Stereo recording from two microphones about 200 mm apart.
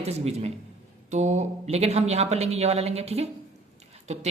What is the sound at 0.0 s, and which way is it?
A man's voice, 30° right (ahead or behind).